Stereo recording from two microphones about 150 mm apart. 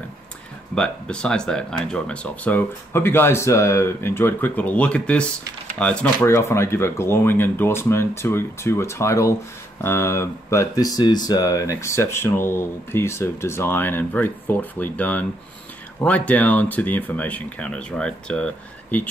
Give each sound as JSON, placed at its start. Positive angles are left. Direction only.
{"t": 0.7, "sound": "speech", "side_deg": 5}
{"t": 6.3, "sound": "speech", "side_deg": 20}